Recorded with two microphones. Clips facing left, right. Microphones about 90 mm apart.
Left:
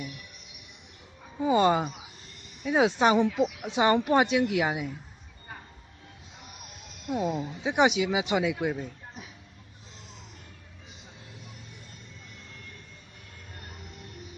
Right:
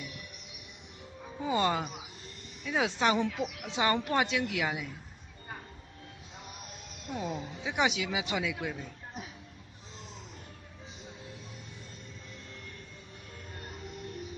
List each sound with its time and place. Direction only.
1.4 s speech: 20° left (ahead or behind)
7.1 s speech: 15° left (ahead or behind)